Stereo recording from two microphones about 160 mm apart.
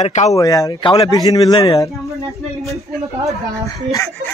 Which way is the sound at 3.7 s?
20° left (ahead or behind).